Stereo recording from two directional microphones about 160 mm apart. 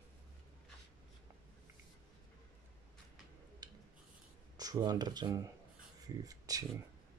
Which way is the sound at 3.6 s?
25° right (ahead or behind).